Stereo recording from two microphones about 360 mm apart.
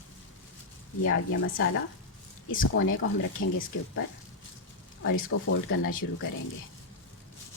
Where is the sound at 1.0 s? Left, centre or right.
Left.